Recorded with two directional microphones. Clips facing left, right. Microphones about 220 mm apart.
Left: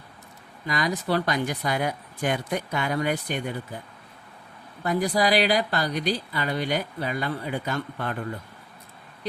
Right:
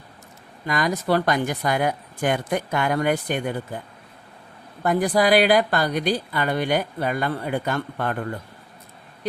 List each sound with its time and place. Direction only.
0.7 s speech: 50° right (ahead or behind)
4.8 s speech: 55° right (ahead or behind)